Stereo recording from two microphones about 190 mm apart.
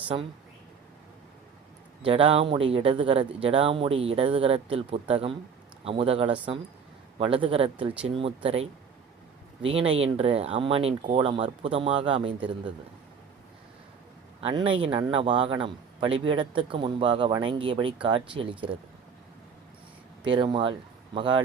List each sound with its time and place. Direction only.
2.0 s speech: 30° right (ahead or behind)
9.6 s speech: 30° right (ahead or behind)
14.4 s speech: 25° right (ahead or behind)
20.2 s speech: 25° right (ahead or behind)